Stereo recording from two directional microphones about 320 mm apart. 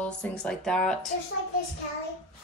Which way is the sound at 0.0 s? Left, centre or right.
Centre.